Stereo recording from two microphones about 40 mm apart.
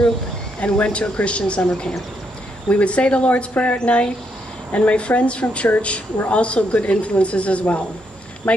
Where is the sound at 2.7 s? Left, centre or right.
Left.